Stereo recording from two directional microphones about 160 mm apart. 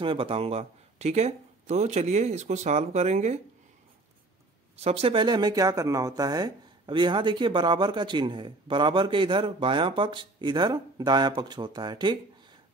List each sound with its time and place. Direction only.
0.0 s speech: 35° right (ahead or behind)
4.7 s speech: 40° right (ahead or behind)